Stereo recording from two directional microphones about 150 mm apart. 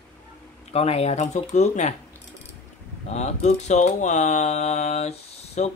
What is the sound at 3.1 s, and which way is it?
Speech, 50° left (ahead or behind).